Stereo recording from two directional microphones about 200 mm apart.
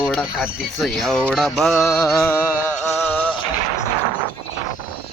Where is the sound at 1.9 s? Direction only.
15° left (ahead or behind).